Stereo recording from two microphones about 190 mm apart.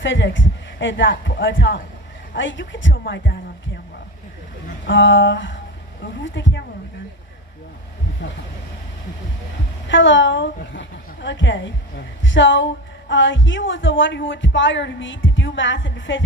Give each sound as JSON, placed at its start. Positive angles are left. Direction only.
{"t": 0.0, "sound": "a woman's voice", "side_deg": 75}
{"t": 4.9, "sound": "a woman's voice", "side_deg": 75}
{"t": 8.2, "sound": "a woman's voice", "side_deg": 70}
{"t": 9.9, "sound": "a woman's voice", "side_deg": 75}